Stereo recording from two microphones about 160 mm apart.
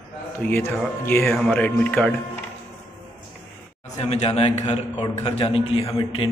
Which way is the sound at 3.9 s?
40° left (ahead or behind).